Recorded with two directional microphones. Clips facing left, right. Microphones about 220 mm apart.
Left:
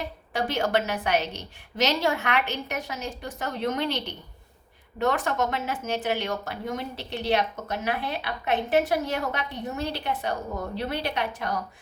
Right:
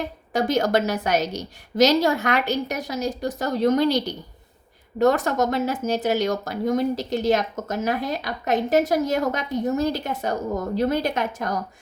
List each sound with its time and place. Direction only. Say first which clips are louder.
0.3 s a woman's voice: right 5 dB; 40° right (ahead or behind)